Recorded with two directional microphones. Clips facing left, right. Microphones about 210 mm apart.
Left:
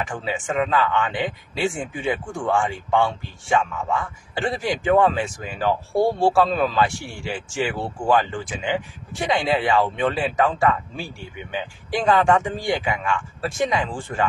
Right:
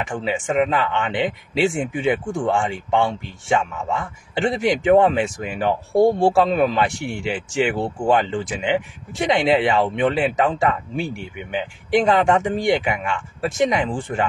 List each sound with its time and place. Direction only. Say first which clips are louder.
0.0 s speech: right 3 dB; 20° right (ahead or behind)